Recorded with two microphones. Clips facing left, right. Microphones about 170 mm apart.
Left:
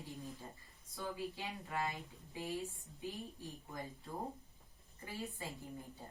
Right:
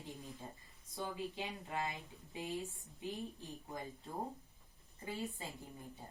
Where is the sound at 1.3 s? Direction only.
20° right (ahead or behind).